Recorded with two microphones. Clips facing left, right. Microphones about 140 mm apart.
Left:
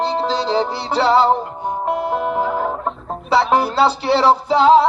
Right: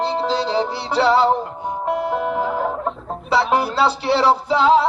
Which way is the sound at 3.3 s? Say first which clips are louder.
Left 2 dB; 25° left (ahead or behind).